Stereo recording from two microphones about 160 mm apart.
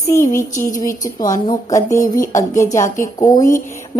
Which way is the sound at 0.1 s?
20° left (ahead or behind).